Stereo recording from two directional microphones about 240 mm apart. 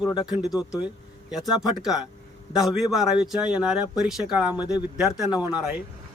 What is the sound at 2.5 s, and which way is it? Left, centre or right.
Speech, centre.